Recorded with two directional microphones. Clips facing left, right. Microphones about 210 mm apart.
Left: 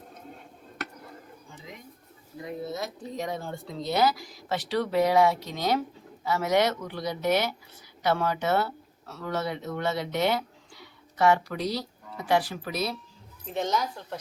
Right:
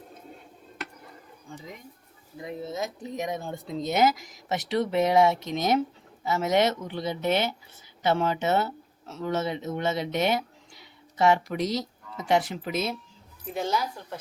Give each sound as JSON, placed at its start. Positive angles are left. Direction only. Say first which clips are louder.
{"t": 2.6, "sound": "speech", "louder": "right 2 dB", "side_deg": -20}
{"t": 13.5, "sound": "a woman's voice", "louder": "even", "side_deg": -5}